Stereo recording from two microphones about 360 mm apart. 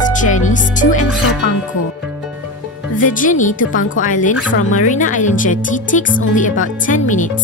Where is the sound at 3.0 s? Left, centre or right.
Left.